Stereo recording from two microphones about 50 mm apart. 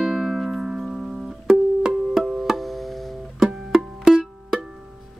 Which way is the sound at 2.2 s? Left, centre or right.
Centre.